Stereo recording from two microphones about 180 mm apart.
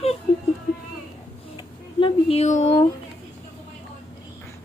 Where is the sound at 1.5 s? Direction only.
30° left (ahead or behind).